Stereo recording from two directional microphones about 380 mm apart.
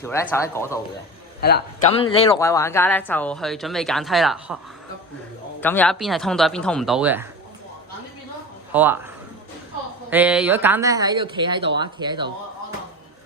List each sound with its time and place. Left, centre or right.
0.0 s speech: centre
1.4 s a man's voice: left
2.0 s speech: centre
5.5 s speech: centre
8.7 s speech: centre
10.1 s speech: centre